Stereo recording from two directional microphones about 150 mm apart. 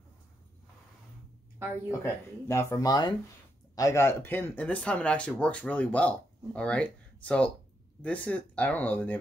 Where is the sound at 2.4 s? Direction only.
20° left (ahead or behind).